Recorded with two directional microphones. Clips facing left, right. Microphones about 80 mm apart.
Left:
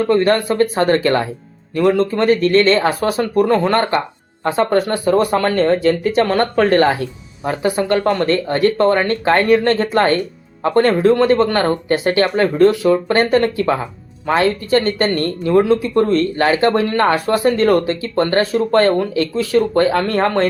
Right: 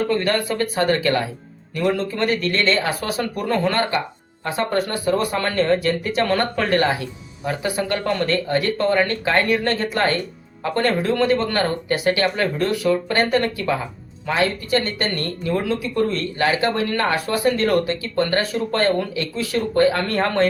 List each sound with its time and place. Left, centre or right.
0.1 s speech: left